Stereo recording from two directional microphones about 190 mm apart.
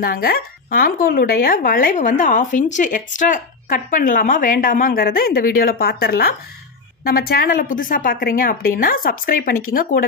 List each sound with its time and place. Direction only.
0.0 s speech: 50° left (ahead or behind)